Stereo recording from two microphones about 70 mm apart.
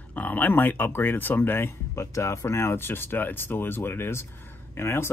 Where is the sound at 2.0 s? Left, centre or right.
Left.